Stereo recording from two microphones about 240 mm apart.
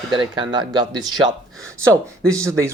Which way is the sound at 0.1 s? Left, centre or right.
Centre.